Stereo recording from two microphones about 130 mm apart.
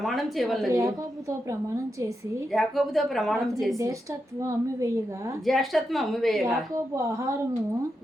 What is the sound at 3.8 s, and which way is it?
A woman's voice, 25° right (ahead or behind).